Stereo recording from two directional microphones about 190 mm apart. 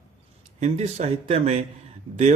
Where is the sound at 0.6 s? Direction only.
35° right (ahead or behind).